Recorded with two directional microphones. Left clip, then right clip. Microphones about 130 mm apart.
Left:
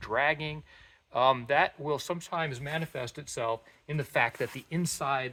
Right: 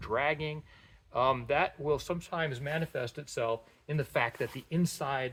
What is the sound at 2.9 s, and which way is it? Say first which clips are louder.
Speech: right 1 dB; 35° left (ahead or behind).